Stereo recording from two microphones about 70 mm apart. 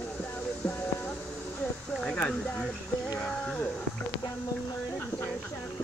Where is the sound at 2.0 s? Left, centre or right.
Centre.